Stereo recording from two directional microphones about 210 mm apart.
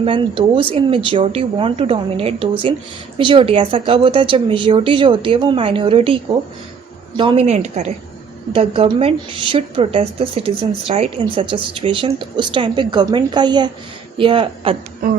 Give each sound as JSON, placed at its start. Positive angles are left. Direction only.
{"t": 0.0, "sound": "a woman's voice", "side_deg": -25}
{"t": 7.2, "sound": "a woman's voice", "side_deg": -25}